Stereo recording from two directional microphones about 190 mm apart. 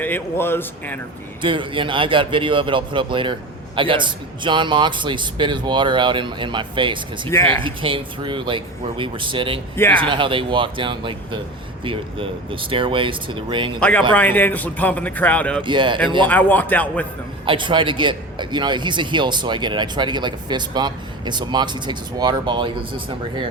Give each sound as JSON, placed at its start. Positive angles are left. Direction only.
{"t": 0.0, "sound": "a man's voice", "side_deg": 10}
{"t": 1.4, "sound": "a man's voice", "side_deg": -25}
{"t": 7.3, "sound": "a man's voice", "side_deg": 15}
{"t": 7.6, "sound": "a man's voice", "side_deg": -25}
{"t": 13.7, "sound": "a man's voice", "side_deg": 5}
{"t": 15.6, "sound": "a man's voice", "side_deg": -25}
{"t": 16.2, "sound": "a man's voice", "side_deg": 10}
{"t": 17.4, "sound": "a man's voice", "side_deg": -25}